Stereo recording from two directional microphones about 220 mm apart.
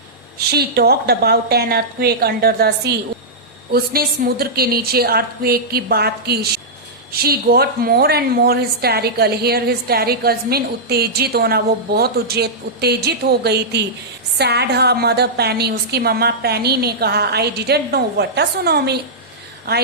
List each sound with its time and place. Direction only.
0.3 s a woman's voice: 45° right (ahead or behind)